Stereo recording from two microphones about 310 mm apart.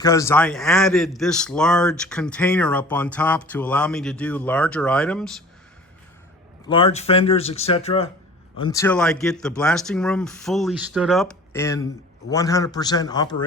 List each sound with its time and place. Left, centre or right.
0.0 s a man's voice: centre
6.7 s a man's voice: centre